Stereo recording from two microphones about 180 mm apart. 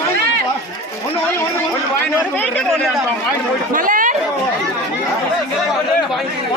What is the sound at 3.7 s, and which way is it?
Chatter, 50° right (ahead or behind).